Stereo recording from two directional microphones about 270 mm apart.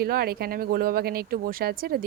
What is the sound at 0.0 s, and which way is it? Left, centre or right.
Speech, right.